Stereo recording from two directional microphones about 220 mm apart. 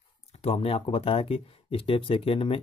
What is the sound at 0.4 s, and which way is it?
Speech, 25° left (ahead or behind).